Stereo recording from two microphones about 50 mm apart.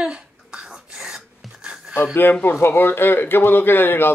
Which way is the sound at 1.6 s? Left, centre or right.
Centre.